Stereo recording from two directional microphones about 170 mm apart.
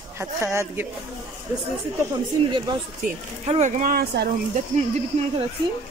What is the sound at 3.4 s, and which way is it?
Speech, 40° right (ahead or behind).